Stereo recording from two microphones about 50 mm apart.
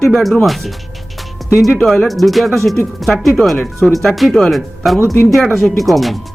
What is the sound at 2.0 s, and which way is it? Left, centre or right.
Speech, centre.